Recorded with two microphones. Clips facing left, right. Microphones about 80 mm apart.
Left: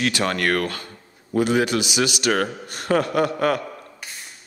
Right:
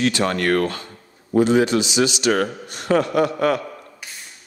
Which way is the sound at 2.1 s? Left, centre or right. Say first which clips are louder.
Right 2 dB; left.